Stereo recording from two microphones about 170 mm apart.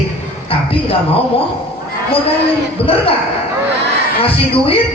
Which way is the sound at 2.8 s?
35° left (ahead or behind).